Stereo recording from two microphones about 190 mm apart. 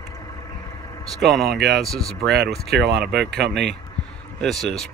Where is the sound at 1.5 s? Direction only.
60° right (ahead or behind).